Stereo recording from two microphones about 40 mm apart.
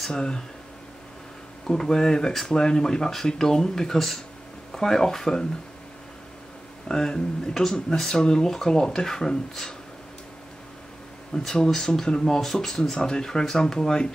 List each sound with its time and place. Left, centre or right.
0.1 s speech: centre
1.7 s speech: centre
6.9 s speech: centre
11.3 s speech: centre